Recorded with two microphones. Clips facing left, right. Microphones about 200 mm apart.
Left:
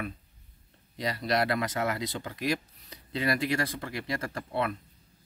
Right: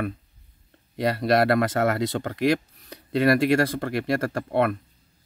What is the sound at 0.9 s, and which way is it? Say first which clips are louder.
Speech: right 8 dB; 60° right (ahead or behind).